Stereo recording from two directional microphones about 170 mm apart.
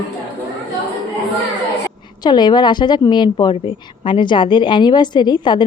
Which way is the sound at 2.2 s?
25° left (ahead or behind).